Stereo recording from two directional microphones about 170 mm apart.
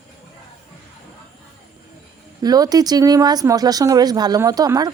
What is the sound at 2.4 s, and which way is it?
Speech, 20° right (ahead or behind).